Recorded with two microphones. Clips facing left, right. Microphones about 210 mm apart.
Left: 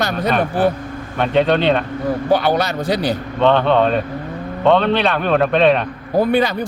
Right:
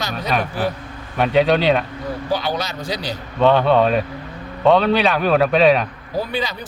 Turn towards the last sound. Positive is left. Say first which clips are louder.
# left 9 dB
turn(degrees=55)  # may be behind; listen again after turning